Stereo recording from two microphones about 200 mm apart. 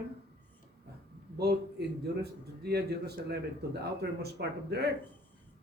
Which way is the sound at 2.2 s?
55° right (ahead or behind).